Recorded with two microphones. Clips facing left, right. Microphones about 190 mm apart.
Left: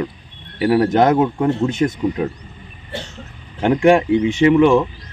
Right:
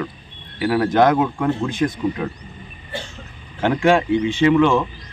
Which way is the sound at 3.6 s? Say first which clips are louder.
Left 3 dB; 15° left (ahead or behind).